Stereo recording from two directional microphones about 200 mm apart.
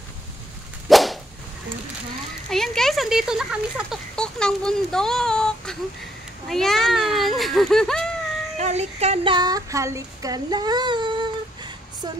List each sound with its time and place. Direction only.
0.8 s whip: centre (ahead or behind)
2.5 s speech: centre (ahead or behind)
8.5 s speech: 35° right (ahead or behind)